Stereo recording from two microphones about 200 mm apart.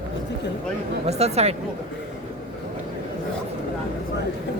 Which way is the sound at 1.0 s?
30° right (ahead or behind).